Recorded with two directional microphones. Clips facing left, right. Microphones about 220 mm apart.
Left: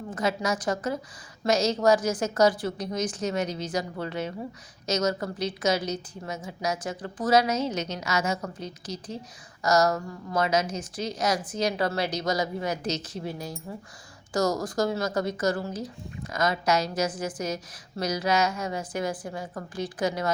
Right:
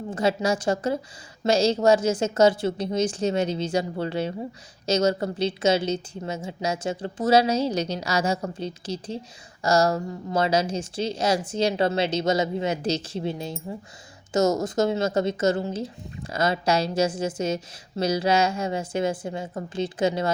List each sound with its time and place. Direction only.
0.1 s speech: 30° right (ahead or behind)